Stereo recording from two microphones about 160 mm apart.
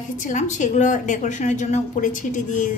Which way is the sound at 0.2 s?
50° left (ahead or behind).